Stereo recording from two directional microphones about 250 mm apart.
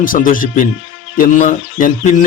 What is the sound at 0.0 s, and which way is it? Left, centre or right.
A man's voice, left.